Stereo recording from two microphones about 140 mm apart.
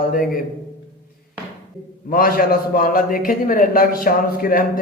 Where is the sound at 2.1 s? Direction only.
90° left.